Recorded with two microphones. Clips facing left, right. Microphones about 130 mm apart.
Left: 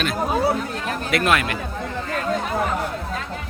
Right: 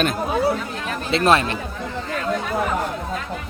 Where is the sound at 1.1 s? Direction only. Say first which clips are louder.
Right 3 dB; 30° right (ahead or behind).